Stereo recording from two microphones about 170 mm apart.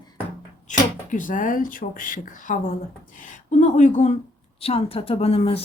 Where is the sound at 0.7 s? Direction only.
50° left (ahead or behind).